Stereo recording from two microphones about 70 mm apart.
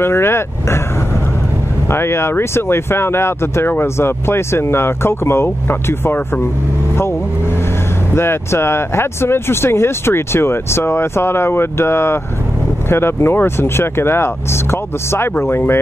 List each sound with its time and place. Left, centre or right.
0.0 s speech: left
1.9 s speech: left
7.0 s vehicle: left
8.1 s speech: left